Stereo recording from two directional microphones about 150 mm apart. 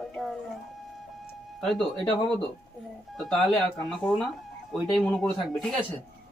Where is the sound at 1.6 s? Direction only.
Centre (ahead or behind).